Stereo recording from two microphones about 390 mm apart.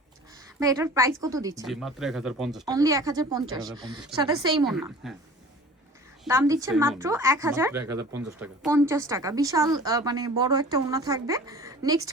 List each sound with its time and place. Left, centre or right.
0.6 s a woman's voice: centre
6.2 s a woman's voice: centre
7.7 s speech: right
8.2 s a woman's voice: centre